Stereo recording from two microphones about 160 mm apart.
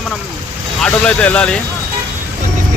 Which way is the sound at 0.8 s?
5° left (ahead or behind).